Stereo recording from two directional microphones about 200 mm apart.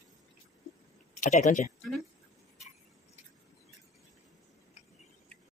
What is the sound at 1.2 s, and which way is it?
Speech, 35° left (ahead or behind).